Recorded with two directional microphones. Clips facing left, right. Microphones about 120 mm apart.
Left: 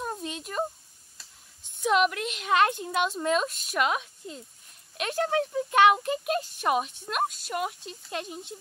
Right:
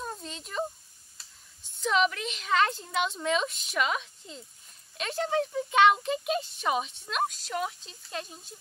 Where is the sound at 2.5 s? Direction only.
55° left (ahead or behind).